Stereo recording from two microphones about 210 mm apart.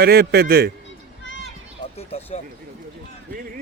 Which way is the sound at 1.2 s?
60° left (ahead or behind).